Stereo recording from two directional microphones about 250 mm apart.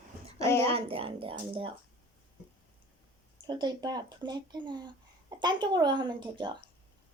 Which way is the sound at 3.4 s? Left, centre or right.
Centre.